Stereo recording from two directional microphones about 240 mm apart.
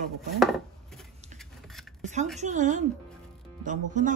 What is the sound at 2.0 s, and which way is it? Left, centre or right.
Speech, right.